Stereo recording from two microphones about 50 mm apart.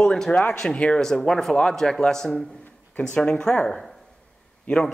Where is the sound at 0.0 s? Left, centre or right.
Centre.